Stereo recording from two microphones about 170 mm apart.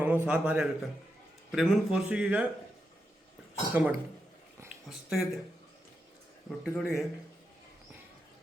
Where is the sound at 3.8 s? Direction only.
10° right (ahead or behind).